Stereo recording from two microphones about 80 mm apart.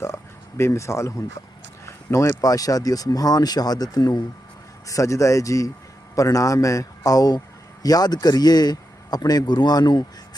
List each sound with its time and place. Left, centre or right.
0.0 s speech: left
4.9 s speech: left